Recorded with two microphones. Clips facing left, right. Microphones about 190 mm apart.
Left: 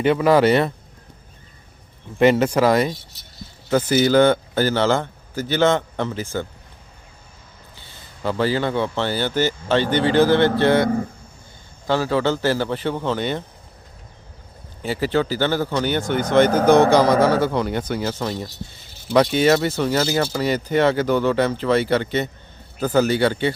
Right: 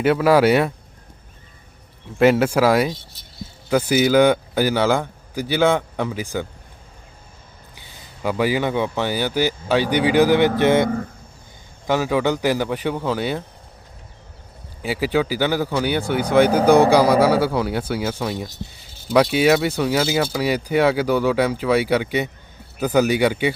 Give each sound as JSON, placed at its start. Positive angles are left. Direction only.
{"t": 0.0, "sound": "speech", "side_deg": -5}
{"t": 2.1, "sound": "speech", "side_deg": -5}
{"t": 7.8, "sound": "speech", "side_deg": -10}
{"t": 11.9, "sound": "speech", "side_deg": -15}
{"t": 14.8, "sound": "speech", "side_deg": -10}